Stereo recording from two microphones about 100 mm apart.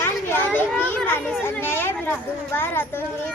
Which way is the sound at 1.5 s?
25° left (ahead or behind).